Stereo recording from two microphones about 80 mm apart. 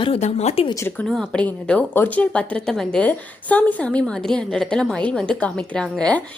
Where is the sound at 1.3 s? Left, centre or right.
Centre.